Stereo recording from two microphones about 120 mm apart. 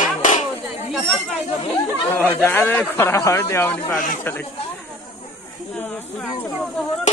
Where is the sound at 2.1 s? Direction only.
15° left (ahead or behind).